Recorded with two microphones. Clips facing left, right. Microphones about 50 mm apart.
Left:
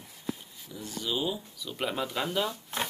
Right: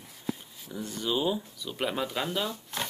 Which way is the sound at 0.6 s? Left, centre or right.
Right.